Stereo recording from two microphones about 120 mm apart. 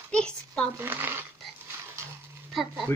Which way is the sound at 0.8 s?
20° right (ahead or behind).